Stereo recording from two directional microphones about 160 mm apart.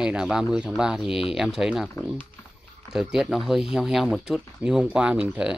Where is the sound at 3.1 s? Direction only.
5° right (ahead or behind).